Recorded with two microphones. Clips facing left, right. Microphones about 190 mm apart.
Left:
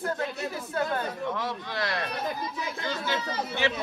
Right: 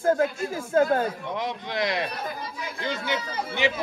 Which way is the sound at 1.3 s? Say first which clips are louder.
Right 2 dB; 20° right (ahead or behind).